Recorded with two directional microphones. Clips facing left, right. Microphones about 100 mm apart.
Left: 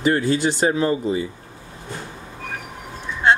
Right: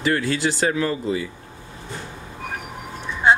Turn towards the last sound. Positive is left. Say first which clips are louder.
# even
turn(degrees=-10)  # may be behind; listen again after turning